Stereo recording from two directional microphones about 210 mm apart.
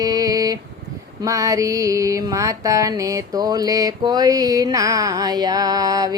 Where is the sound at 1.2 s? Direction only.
15° right (ahead or behind).